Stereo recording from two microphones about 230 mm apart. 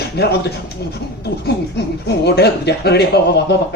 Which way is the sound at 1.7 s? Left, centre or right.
Left.